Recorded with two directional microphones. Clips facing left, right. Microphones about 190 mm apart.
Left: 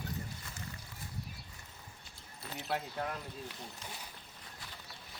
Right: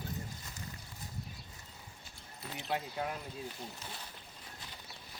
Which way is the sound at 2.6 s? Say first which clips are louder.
Right 1 dB; 5° right (ahead or behind).